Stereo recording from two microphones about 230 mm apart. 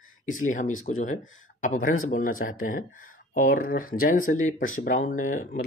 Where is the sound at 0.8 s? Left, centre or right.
Left.